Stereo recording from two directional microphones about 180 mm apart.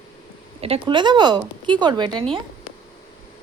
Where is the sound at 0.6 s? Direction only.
30° right (ahead or behind).